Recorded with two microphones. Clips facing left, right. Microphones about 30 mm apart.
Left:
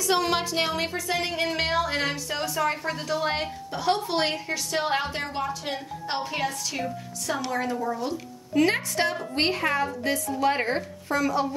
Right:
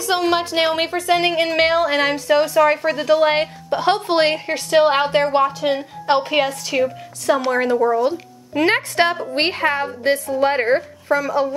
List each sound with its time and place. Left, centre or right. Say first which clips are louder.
0.0 s a woman's voice: right 5 dB; right
3.7 s a woman's voice: right 8 dB; right
8.0 s a woman's voice: right 11 dB; right
10.4 s speech: right 5 dB; right
10.7 s speech: right 9 dB; centre